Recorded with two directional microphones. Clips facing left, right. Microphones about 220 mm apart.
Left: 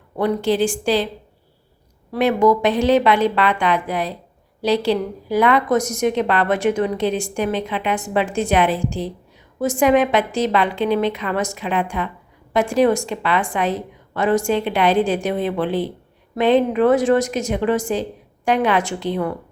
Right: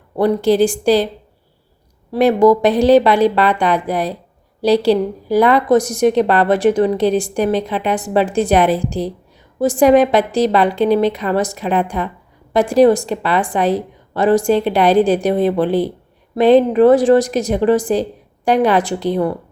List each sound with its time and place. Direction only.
0.2 s a woman's voice: 35° right (ahead or behind)
2.1 s a woman's voice: 35° right (ahead or behind)